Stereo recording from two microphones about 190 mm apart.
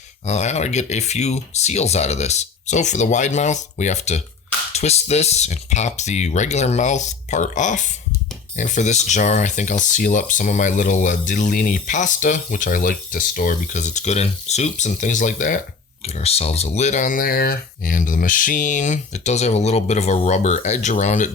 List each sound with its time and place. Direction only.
0.3 s speech: 35° left (ahead or behind)